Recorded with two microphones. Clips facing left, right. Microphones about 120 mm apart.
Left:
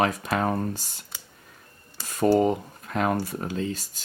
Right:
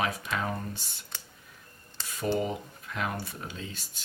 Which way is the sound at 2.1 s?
45° left (ahead or behind).